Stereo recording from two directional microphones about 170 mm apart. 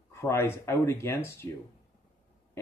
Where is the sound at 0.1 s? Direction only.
15° left (ahead or behind).